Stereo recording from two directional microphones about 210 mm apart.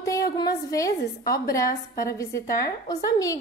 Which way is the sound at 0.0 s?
15° left (ahead or behind).